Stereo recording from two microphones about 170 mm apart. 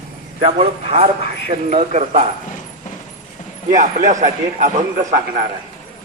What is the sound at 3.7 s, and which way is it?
Speech, 50° right (ahead or behind).